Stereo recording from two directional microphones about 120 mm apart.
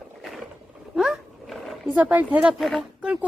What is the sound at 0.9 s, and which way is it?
Dog, centre (ahead or behind).